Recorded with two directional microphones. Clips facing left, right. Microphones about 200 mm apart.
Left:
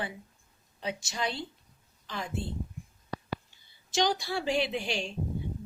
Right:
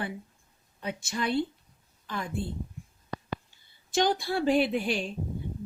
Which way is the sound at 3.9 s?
55° right (ahead or behind).